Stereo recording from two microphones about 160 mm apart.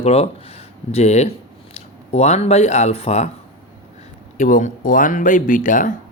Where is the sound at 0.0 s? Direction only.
40° left (ahead or behind).